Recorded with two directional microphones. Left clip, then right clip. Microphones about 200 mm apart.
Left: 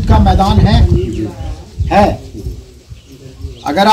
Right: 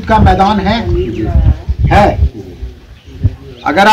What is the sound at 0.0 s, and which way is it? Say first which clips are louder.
Speech: right 4 dB; 20° left (ahead or behind).